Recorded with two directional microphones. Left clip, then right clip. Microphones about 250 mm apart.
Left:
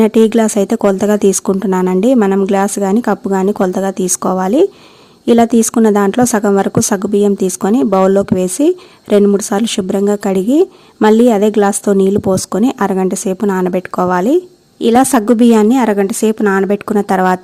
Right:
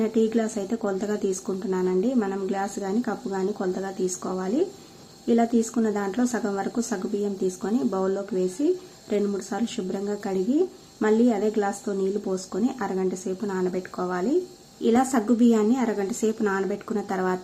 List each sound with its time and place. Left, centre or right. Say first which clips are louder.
0.0 s a woman's voice: left 14 dB; left